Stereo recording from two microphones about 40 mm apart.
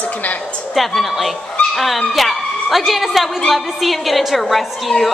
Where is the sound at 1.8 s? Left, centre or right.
Centre.